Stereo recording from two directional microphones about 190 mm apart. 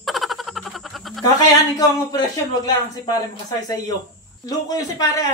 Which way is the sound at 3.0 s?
20° left (ahead or behind).